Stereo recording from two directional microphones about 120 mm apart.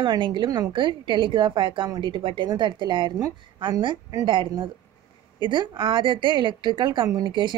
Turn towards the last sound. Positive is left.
turn(degrees=-40)  # may be behind; listen again after turning